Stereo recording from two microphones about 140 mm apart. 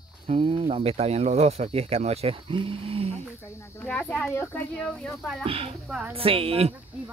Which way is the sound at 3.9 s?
5° left (ahead or behind).